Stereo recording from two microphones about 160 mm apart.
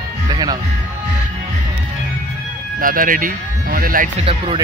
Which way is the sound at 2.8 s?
60° right (ahead or behind).